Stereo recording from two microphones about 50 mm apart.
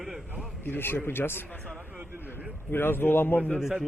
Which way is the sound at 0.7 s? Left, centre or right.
Left.